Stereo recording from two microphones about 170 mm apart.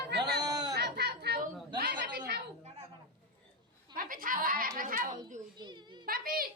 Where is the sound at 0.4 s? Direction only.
20° right (ahead or behind).